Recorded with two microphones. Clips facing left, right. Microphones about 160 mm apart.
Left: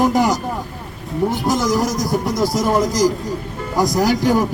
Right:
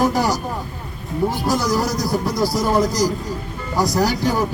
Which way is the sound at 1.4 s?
20° left (ahead or behind).